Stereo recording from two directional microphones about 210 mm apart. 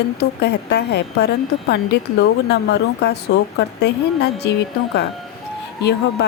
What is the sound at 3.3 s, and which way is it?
Speech, 65° left (ahead or behind).